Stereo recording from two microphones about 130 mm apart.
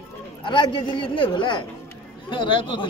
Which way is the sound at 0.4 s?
40° left (ahead or behind).